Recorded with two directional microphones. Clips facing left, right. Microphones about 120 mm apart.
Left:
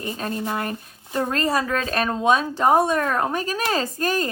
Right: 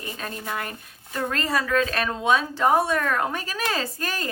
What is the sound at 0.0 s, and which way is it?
Speech, 30° left (ahead or behind).